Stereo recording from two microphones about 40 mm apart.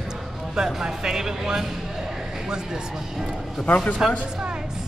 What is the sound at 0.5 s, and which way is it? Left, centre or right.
Speech, centre.